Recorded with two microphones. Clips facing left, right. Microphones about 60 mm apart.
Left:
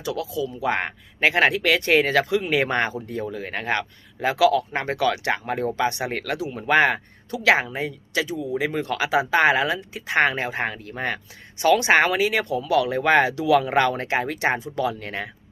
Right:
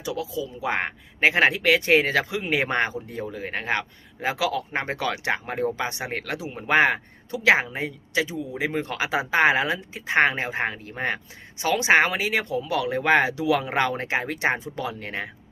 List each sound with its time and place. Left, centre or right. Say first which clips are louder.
0.0 s speech: left 2 dB; centre
6.3 s speech: left 1 dB; right
14.6 s speech: left 5 dB; right